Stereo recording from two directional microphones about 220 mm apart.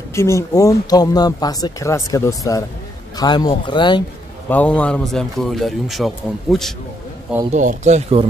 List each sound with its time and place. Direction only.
0.1 s speech: 15° left (ahead or behind)
4.5 s speech: 5° left (ahead or behind)
7.5 s speech: 35° right (ahead or behind)